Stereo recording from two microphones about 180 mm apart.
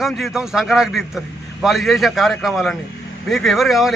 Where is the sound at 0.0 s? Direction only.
Centre (ahead or behind).